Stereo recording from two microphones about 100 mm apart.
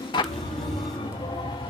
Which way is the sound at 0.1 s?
50° left (ahead or behind).